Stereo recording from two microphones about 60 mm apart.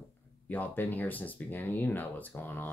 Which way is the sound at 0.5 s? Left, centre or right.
Left.